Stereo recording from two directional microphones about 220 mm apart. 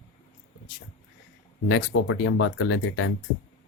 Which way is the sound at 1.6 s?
60° left (ahead or behind).